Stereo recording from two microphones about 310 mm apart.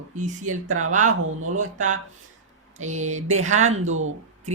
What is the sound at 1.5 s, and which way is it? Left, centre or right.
A woman's voice, right.